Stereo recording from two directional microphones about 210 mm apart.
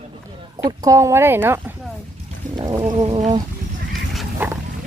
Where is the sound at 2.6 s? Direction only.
20° right (ahead or behind).